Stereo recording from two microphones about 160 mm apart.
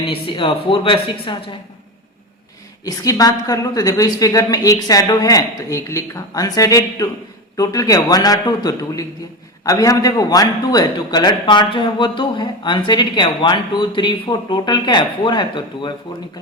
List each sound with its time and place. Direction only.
0.0 s speech: 30° left (ahead or behind)
2.8 s a man's voice: 25° left (ahead or behind)